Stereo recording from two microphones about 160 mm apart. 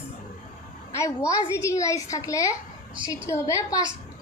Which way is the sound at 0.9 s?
20° left (ahead or behind).